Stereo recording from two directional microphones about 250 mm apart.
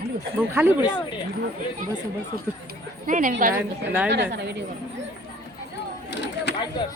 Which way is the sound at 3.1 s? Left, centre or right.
Right.